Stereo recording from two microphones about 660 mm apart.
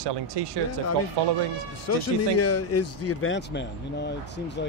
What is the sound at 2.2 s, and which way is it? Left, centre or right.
Speech, left.